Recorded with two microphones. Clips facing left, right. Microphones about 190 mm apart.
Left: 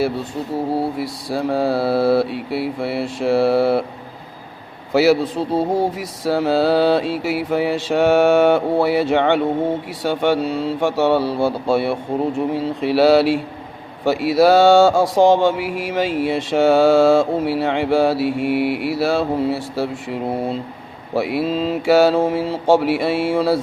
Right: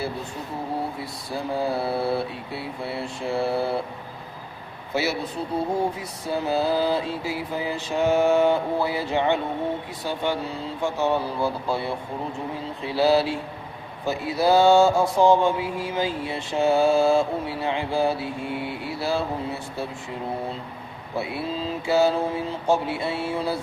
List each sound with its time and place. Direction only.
0.9 s mantra: 80° left
4.9 s speech: 90° left
6.0 s mantra: 90° left
14.0 s speech: 90° left